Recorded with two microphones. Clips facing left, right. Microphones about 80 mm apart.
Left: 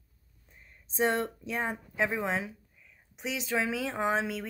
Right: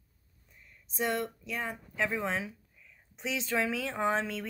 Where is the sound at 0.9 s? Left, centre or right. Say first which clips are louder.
Left 4 dB; left.